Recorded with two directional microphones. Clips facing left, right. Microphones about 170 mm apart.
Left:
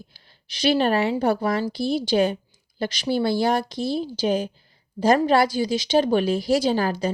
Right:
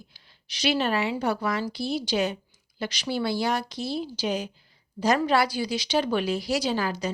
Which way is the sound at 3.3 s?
50° left (ahead or behind).